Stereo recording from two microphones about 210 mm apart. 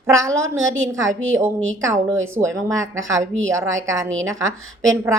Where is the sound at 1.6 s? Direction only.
65° right (ahead or behind).